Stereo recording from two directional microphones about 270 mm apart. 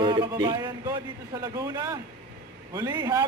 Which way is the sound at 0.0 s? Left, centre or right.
Centre.